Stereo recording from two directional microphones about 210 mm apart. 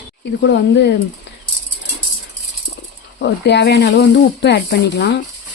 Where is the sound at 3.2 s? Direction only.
55° left (ahead or behind).